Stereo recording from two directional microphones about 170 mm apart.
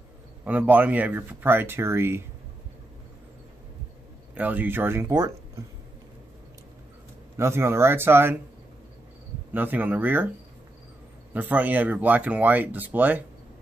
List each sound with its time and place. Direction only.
0.5 s speech: 10° right (ahead or behind)
4.4 s speech: 10° right (ahead or behind)
7.3 s speech: 15° right (ahead or behind)
9.5 s speech: 10° right (ahead or behind)
11.3 s speech: 10° right (ahead or behind)